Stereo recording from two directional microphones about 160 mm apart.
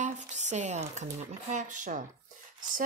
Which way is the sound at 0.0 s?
45° right (ahead or behind).